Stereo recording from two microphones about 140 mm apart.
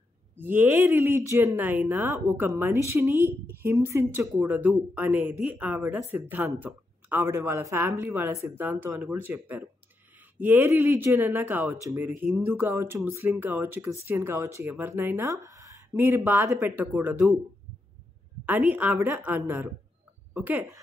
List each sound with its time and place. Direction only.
0.4 s speech: 15° right (ahead or behind)
18.6 s speech: 5° right (ahead or behind)